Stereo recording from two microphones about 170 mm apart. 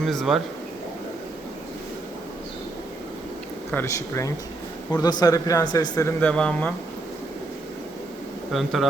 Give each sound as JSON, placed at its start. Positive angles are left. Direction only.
{"t": 0.0, "sound": "speech", "side_deg": 0}
{"t": 3.7, "sound": "speech", "side_deg": 15}
{"t": 8.5, "sound": "speech", "side_deg": 0}